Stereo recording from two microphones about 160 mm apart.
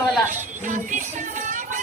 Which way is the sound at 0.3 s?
50° right (ahead or behind).